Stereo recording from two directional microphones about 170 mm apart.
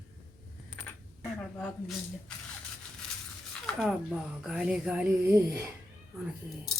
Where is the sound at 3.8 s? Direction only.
5° right (ahead or behind).